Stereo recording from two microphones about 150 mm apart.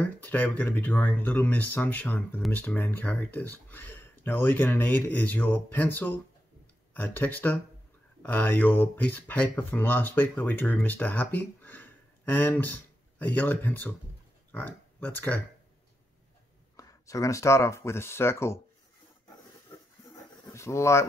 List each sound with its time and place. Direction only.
0.0 s speech: 10° left (ahead or behind)
16.7 s speech: 20° left (ahead or behind)
20.5 s speech: 20° left (ahead or behind)